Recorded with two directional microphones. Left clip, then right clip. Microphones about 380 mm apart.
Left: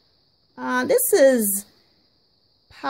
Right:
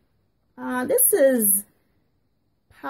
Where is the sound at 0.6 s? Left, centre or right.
Centre.